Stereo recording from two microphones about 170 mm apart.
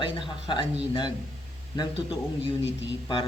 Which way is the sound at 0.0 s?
30° left (ahead or behind).